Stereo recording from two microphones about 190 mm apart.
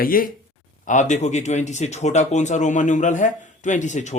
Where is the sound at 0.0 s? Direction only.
50° left (ahead or behind).